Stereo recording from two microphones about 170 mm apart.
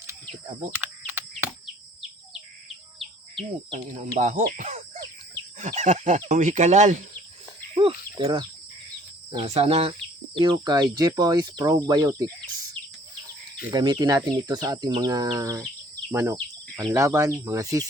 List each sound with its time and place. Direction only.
0.8 s a sound: 10° right (ahead or behind)
3.9 s speech: 45° right (ahead or behind)
7.8 s speech: 30° right (ahead or behind)
13.7 s speech: 25° right (ahead or behind)